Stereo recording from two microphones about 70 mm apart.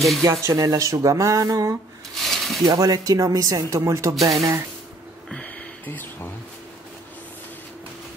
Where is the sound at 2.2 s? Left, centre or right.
Centre.